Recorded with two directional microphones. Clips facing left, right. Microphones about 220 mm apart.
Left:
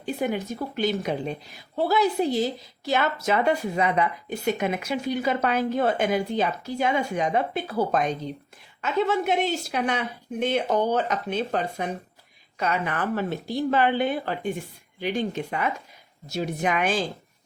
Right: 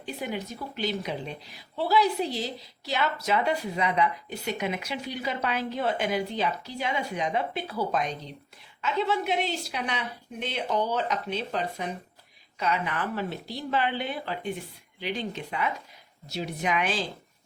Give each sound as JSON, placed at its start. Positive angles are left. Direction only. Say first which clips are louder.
{"t": 0.0, "sound": "a woman's voice", "louder": "left 6 dB", "side_deg": 50}